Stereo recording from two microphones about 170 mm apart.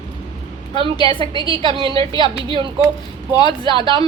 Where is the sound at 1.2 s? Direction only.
25° right (ahead or behind).